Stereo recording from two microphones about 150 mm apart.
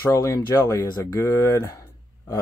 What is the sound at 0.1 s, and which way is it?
Speech, 20° left (ahead or behind).